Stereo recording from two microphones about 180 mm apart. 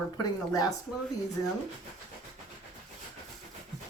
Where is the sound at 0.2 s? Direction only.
20° left (ahead or behind).